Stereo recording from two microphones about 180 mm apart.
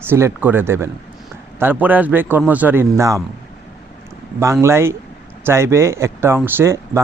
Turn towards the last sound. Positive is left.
turn(degrees=-15)  # may be behind; listen again after turning